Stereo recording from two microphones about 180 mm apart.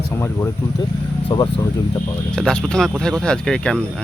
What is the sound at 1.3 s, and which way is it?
Speech, 25° left (ahead or behind).